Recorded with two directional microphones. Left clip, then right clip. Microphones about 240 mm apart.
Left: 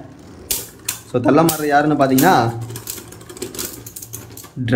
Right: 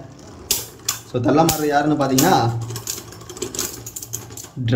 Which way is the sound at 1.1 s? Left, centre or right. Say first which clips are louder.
Left 3 dB; centre.